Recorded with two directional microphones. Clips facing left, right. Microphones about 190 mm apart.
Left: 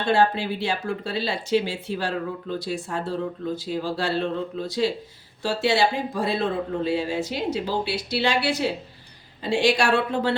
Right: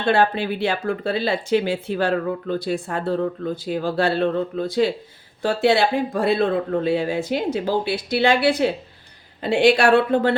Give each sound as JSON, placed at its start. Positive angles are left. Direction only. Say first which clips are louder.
{"t": 0.1, "sound": "speech", "louder": "right 2 dB", "side_deg": -60}